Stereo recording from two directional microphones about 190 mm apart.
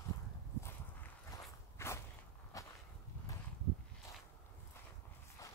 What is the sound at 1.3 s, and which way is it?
Walk, 15° left (ahead or behind).